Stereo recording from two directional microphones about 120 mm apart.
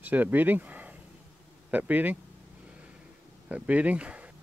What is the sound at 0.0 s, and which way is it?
Speech, 15° right (ahead or behind).